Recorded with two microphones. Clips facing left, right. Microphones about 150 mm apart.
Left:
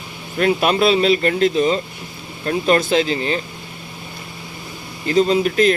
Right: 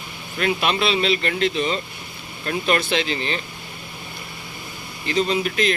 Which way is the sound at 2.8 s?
40° left (ahead or behind).